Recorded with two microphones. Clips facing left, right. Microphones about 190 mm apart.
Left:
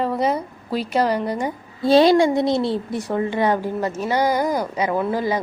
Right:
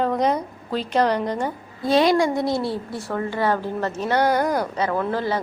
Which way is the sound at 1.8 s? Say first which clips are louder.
Left 4 dB; 30° left (ahead or behind).